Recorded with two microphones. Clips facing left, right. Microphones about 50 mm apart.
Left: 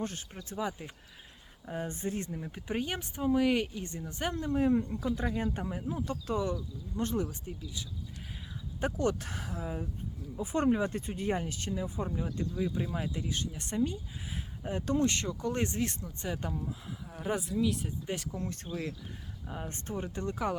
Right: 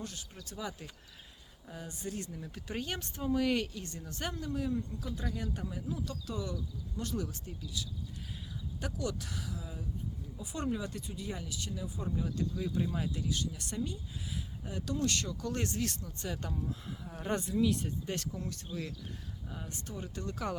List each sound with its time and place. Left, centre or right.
0.0 s speech: left; by 4.4 s centre
4.4 s speech: left
8.8 s speech: left; by 18.3 s centre
18.3 s speech: left
20.1 s speech: left